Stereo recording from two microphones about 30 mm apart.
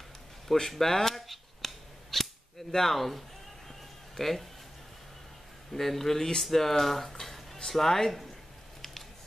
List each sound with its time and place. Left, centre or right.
0.7 s speech: centre
1.2 s scissors: centre
2.7 s speech: centre
5.7 s speech: centre